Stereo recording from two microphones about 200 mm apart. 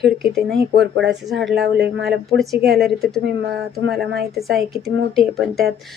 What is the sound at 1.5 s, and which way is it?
A woman's voice, 55° right (ahead or behind).